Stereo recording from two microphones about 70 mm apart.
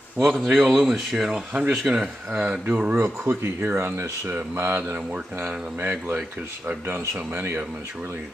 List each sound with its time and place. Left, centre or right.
0.5 s speech: centre
2.6 s speech: right
3.0 s speech: right